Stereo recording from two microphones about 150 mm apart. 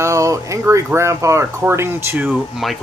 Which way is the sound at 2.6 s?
Centre (ahead or behind).